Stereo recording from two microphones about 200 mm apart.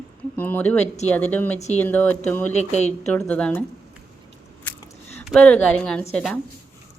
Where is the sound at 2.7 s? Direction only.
35° left (ahead or behind).